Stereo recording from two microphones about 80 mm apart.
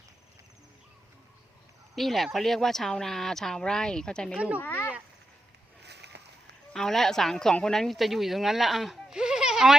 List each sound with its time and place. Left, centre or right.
2.0 s speech: centre
4.4 s speech: centre
4.6 s speech: left
6.7 s speech: centre